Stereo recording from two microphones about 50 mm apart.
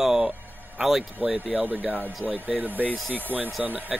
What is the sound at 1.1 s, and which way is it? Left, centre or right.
Speech, right.